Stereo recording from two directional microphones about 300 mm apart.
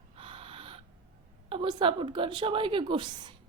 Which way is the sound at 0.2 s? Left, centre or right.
Centre.